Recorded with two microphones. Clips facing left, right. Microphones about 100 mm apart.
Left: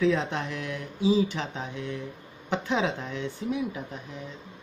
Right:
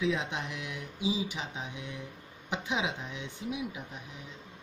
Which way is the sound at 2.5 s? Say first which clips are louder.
Left 6 dB; 10° right (ahead or behind).